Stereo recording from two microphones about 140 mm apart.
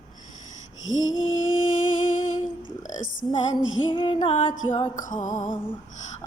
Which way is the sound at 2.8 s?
65° left (ahead or behind).